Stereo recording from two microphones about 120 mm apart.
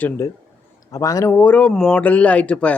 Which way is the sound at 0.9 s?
30° left (ahead or behind).